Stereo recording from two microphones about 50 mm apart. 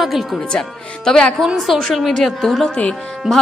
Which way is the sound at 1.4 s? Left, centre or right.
Centre.